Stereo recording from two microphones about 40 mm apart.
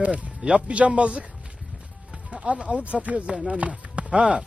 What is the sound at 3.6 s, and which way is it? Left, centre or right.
Chopping, right.